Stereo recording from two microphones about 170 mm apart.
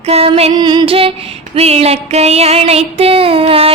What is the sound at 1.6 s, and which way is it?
Female singing, 35° right (ahead or behind).